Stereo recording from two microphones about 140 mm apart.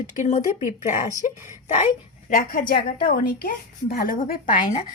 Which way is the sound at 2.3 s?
75° left (ahead or behind).